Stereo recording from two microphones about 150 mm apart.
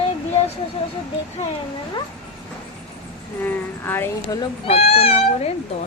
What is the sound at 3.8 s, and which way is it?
Speech, 15° left (ahead or behind).